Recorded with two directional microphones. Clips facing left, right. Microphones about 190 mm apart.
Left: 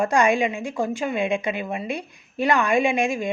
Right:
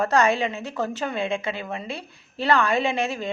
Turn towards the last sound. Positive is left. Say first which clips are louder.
# left 3 dB
turn(degrees=15)  # may be behind; listen again after turning